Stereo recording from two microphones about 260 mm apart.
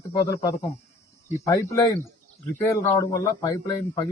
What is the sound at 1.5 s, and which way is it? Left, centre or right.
Speech, centre.